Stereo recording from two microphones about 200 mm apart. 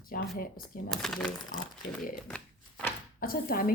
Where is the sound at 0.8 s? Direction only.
Centre (ahead or behind).